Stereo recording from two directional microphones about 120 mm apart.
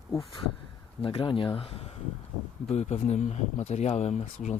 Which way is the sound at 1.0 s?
45° left (ahead or behind).